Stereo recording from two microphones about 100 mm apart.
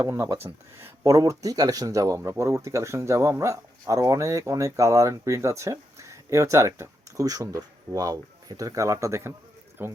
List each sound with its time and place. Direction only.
0.0 s speech: 30° right (ahead or behind)